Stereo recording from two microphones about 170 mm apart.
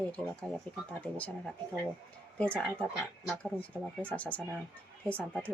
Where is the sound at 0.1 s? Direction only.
Centre (ahead or behind).